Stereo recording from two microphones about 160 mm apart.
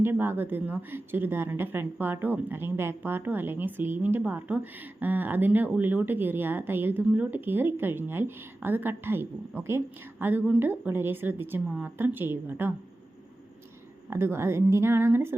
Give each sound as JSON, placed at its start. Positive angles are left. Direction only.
{"t": 0.0, "sound": "a woman's voice", "side_deg": -15}
{"t": 14.1, "sound": "a woman's voice", "side_deg": -15}